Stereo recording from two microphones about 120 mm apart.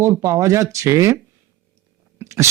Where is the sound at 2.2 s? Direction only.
25° right (ahead or behind).